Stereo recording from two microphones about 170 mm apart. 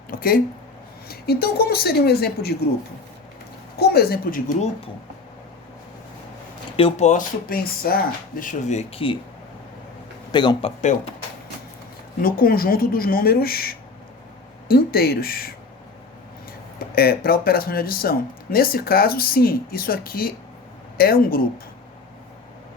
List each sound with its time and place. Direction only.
0.1 s a sound: 60° left (ahead or behind)
1.0 s speech: 65° left (ahead or behind)
3.8 s speech: 70° left (ahead or behind)
6.7 s speech: 35° left (ahead or behind)
10.3 s speech: 25° left (ahead or behind)
10.8 s speech: 45° left (ahead or behind)
12.2 s speech: 60° left (ahead or behind)
16.9 s speech: 60° left (ahead or behind)